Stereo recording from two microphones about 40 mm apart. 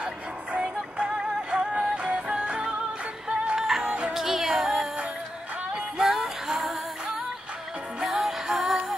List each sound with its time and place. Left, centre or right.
0.0 s music: right
3.6 s music: centre
5.9 s music: centre